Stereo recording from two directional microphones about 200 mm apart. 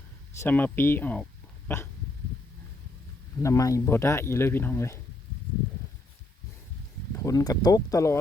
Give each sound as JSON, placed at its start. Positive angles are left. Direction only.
{"t": 0.3, "sound": "speech", "side_deg": 10}
{"t": 3.4, "sound": "speech", "side_deg": 15}
{"t": 7.2, "sound": "speech", "side_deg": 15}